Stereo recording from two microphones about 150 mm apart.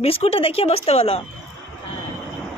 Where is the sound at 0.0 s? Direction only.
40° left (ahead or behind).